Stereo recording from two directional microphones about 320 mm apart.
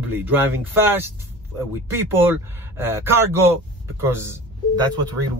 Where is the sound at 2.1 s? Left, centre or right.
Centre.